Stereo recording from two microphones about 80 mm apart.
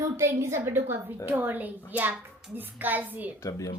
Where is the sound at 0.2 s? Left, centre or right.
Right.